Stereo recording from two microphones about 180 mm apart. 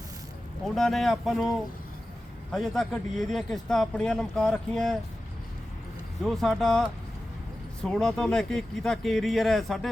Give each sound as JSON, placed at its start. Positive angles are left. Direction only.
{"t": 0.6, "sound": "speech", "side_deg": 0}
{"t": 6.2, "sound": "speech", "side_deg": 0}